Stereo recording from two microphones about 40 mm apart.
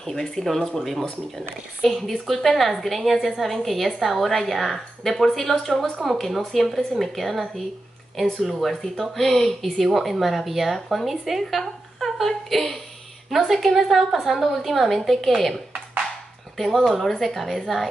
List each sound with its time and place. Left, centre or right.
0.0 s a woman's voice: centre
11.6 s a woman's voice: centre
13.5 s a woman's voice: centre